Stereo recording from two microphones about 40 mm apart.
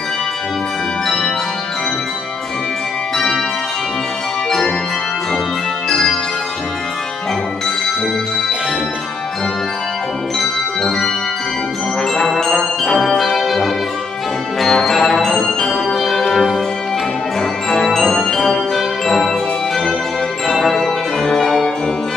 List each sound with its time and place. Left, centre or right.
1.0 s music: centre
4.5 s organ: centre
5.9 s music: centre
12.2 s music: centre
13.2 s brass instrument: centre
14.6 s music: centre
15.9 s music: centre
20.5 s music: centre